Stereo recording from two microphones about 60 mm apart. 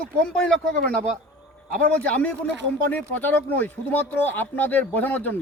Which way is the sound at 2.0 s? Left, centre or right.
Left.